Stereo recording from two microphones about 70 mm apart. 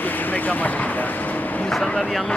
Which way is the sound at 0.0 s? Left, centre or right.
Left.